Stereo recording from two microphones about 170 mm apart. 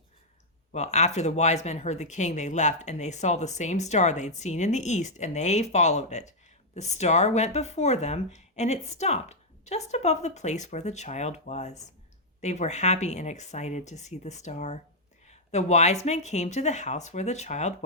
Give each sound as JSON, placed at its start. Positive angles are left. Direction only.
{"t": 0.7, "sound": "speech", "side_deg": 40}